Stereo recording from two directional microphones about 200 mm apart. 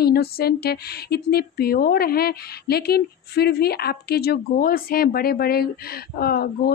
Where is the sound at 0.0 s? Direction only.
50° left (ahead or behind).